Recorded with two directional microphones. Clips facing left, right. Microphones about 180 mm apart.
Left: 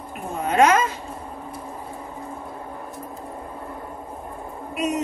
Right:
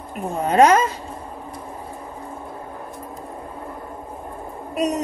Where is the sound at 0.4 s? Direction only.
35° right (ahead or behind).